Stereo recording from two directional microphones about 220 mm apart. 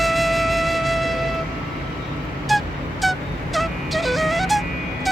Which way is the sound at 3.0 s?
Centre (ahead or behind).